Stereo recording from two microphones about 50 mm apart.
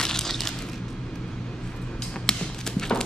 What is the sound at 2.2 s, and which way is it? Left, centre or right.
Tap, centre.